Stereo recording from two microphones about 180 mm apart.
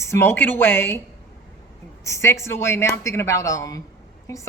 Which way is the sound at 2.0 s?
15° left (ahead or behind).